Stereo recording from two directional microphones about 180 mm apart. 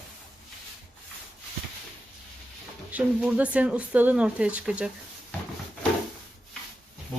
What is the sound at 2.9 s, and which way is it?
Speech, 5° right (ahead or behind).